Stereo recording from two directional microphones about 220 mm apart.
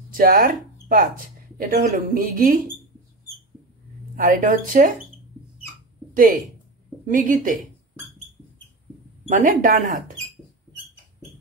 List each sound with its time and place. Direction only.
0.1 s speech: 40° right (ahead or behind)
4.2 s speech: 40° right (ahead or behind)
6.1 s speech: 40° right (ahead or behind)
9.3 s speech: 35° right (ahead or behind)